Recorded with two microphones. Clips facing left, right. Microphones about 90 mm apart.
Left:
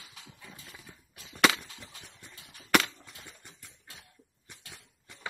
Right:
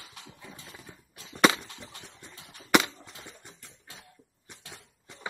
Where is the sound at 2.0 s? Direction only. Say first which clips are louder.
Right 3 dB; 25° right (ahead or behind).